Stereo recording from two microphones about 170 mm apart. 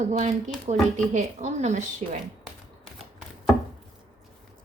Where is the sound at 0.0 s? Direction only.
45° right (ahead or behind).